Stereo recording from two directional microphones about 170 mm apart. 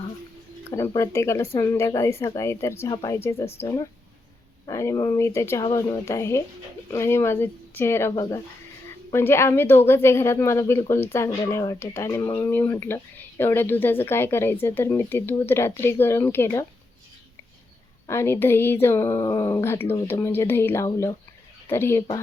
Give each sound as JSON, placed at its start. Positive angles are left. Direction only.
{"t": 0.7, "sound": "speech", "side_deg": 20}
{"t": 18.0, "sound": "speech", "side_deg": 15}